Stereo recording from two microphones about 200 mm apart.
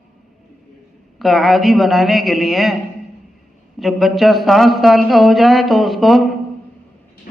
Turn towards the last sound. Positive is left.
turn(degrees=0)  # may be behind; listen again after turning